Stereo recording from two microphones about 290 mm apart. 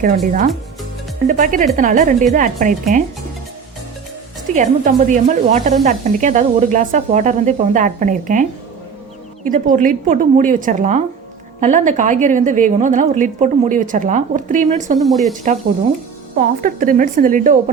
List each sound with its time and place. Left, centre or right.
0.3 s speech: right
4.5 s speech: right
14.9 s speech: centre
16.6 s speech: right